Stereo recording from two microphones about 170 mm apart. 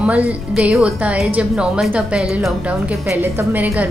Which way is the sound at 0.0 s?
10° right (ahead or behind).